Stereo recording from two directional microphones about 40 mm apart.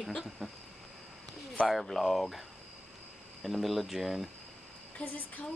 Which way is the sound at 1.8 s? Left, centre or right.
Centre.